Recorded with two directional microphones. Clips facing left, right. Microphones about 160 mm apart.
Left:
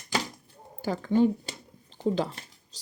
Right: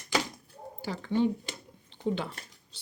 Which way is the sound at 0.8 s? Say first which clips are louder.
Left 5 dB; 45° left (ahead or behind).